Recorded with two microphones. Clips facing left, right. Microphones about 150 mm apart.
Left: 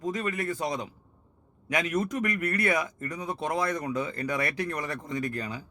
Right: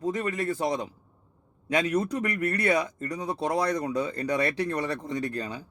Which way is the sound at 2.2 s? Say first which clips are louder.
Right 1 dB; 25° right (ahead or behind).